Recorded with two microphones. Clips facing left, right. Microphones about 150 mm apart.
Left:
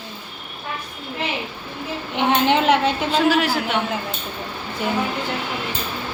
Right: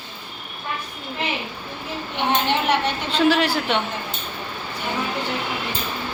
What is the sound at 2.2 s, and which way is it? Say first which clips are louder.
Speech: left 4 dB; 90° left.